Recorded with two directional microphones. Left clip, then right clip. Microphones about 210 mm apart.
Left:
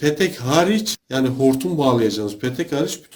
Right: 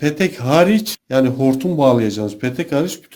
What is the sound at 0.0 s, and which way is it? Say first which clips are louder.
Speech: even; 45° right (ahead or behind).